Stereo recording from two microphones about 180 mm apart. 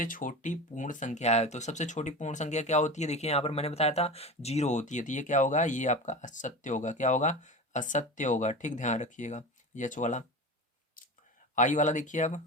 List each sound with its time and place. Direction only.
0.0 s speech: 50° left (ahead or behind)
11.5 s speech: 45° left (ahead or behind)